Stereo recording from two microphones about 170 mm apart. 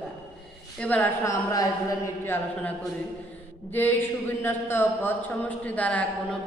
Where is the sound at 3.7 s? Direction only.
10° left (ahead or behind).